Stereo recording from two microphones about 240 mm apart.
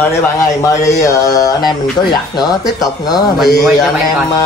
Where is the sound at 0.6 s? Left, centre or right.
Centre.